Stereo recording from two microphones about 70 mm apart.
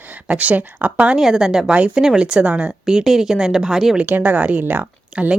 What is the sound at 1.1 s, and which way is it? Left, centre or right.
A woman's voice, centre.